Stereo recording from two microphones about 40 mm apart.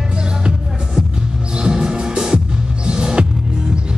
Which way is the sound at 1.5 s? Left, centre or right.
Right.